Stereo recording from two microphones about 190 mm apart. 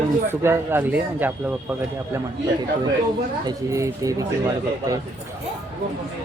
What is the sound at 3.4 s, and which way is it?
Speech, 15° right (ahead or behind).